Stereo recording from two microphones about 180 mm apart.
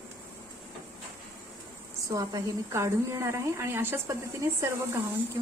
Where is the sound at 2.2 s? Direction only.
20° right (ahead or behind).